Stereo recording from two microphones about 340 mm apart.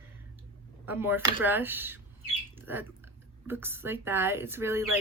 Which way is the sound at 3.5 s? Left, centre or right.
Centre.